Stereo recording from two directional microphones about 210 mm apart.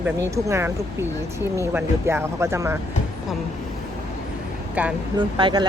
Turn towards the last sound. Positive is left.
turn(degrees=-25)  # may be behind; listen again after turning